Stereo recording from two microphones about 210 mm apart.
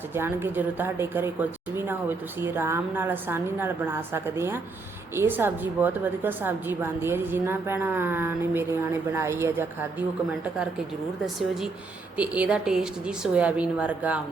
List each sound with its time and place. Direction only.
0.1 s a woman's voice: 10° right (ahead or behind)
12.1 s a woman's voice: 5° right (ahead or behind)